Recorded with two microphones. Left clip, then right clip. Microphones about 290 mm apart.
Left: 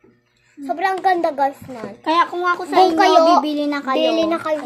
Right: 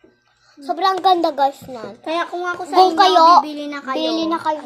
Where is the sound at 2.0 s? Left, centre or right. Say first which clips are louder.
Left 5 dB; centre.